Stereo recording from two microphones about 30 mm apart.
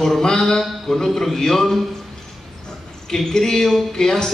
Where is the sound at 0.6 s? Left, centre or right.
Centre.